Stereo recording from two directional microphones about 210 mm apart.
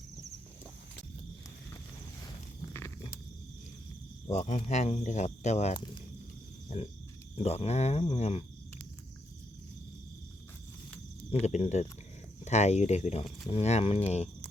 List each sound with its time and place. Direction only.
2.7 s a sound: 10° left (ahead or behind)
4.3 s speech: 35° left (ahead or behind)
7.3 s speech: 30° left (ahead or behind)
8.1 s cricket: 30° left (ahead or behind)
11.3 s speech: 30° left (ahead or behind)